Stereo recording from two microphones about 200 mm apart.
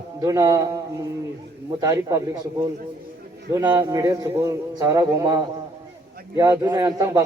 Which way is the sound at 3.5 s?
10° right (ahead or behind).